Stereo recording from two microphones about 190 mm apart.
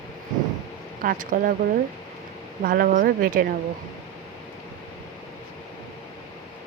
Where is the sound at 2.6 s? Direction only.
50° right (ahead or behind).